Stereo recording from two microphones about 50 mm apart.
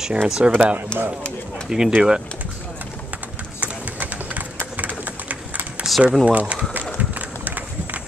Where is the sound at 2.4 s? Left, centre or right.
Right.